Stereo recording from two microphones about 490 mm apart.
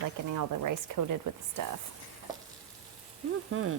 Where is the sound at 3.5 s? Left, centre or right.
Right.